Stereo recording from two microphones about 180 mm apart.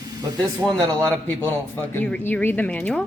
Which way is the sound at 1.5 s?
10° left (ahead or behind).